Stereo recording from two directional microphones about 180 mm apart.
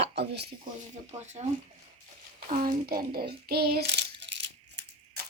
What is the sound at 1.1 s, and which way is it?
Speech, 35° right (ahead or behind).